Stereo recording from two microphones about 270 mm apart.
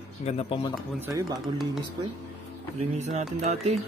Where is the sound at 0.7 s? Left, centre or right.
Centre.